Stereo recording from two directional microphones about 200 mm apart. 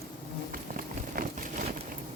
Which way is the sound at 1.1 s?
40° right (ahead or behind).